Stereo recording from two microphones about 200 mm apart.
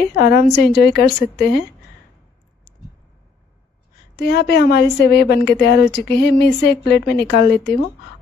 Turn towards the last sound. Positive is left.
turn(degrees=55)  # may be behind; listen again after turning